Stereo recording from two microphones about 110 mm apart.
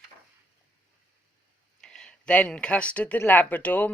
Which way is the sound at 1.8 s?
5° left (ahead or behind).